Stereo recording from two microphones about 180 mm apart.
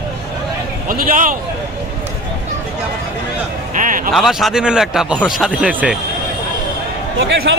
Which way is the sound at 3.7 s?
45° right (ahead or behind).